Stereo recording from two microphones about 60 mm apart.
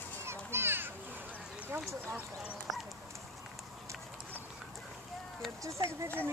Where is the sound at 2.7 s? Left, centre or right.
Centre.